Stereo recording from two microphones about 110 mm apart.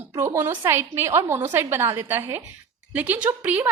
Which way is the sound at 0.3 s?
20° right (ahead or behind).